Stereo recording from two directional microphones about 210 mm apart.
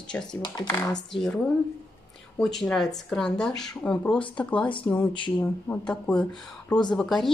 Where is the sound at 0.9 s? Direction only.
Centre (ahead or behind).